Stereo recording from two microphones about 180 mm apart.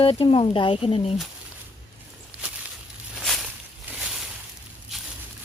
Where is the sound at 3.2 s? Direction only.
Centre (ahead or behind).